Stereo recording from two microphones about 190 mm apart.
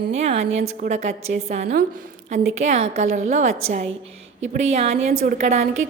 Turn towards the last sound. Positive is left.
turn(degrees=-40)  # may be behind; listen again after turning